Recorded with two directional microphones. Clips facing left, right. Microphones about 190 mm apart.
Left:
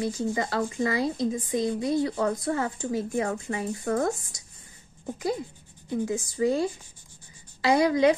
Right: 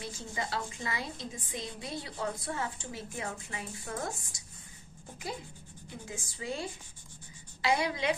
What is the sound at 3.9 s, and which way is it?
Speech, 60° left (ahead or behind).